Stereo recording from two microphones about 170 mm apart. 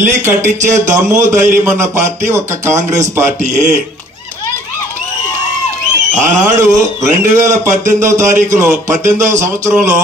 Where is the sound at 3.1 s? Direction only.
15° right (ahead or behind).